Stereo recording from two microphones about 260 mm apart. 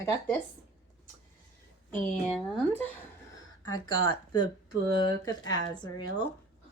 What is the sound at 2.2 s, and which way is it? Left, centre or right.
A woman's voice, centre.